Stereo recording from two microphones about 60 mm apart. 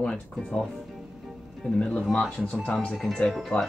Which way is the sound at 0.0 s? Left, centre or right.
Centre.